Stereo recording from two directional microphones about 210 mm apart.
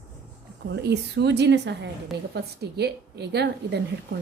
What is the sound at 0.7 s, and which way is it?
A woman's voice, 55° right (ahead or behind).